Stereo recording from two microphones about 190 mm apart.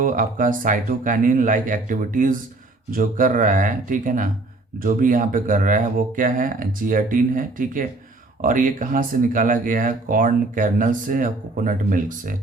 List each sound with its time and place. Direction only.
0.0 s speech: 45° right (ahead or behind)